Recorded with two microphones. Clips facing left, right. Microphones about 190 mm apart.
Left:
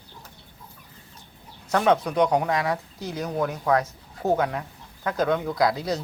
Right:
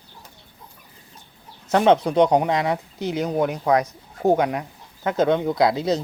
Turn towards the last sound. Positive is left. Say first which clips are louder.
# right 4 dB
turn(degrees=-25)  # may be behind; listen again after turning